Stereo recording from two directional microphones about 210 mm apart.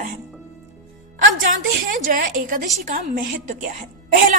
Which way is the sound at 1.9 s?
40° right (ahead or behind).